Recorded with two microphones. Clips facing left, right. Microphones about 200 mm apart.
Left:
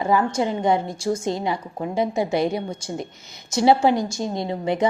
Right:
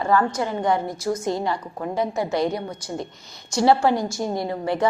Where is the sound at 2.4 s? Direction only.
25° left (ahead or behind).